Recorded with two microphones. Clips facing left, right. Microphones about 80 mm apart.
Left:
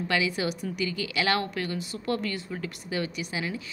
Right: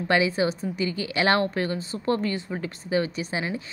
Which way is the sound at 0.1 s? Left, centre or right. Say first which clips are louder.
Right 6 dB; right.